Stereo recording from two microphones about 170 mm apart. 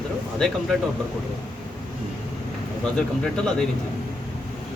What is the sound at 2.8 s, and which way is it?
Speech, 5° left (ahead or behind).